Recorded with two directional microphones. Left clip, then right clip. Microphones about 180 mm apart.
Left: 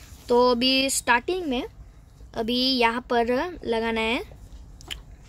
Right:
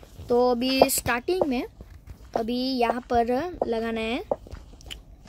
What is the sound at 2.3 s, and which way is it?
Speech, 5° left (ahead or behind).